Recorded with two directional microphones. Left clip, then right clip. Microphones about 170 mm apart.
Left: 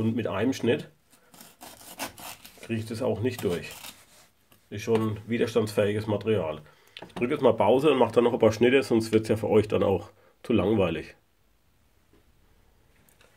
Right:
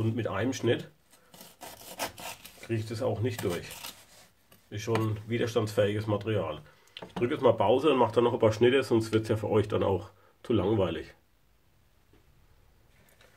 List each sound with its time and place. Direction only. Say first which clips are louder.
0.0 s speech: left 4 dB; 35° left (ahead or behind)
1.6 s rub: right 1 dB; 15° left (ahead or behind)
2.6 s speech: left 2 dB; 35° left (ahead or behind)